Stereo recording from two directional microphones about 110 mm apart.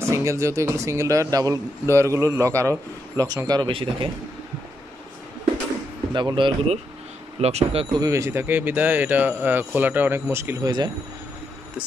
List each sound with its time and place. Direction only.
0.0 s speech: 25° right (ahead or behind)
3.6 s speech: 50° right (ahead or behind)
6.1 s speech: 45° right (ahead or behind)
7.3 s speech: 75° right (ahead or behind)
7.9 s speech: 30° right (ahead or behind)
10.6 s speech: 40° right (ahead or behind)